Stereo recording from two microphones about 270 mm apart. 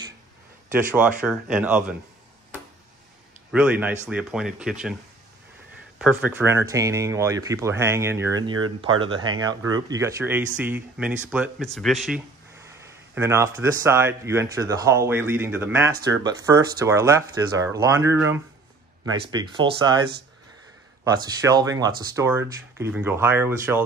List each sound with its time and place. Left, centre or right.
0.9 s speech: centre
3.5 s speech: centre
5.9 s speech: centre
21.0 s speech: centre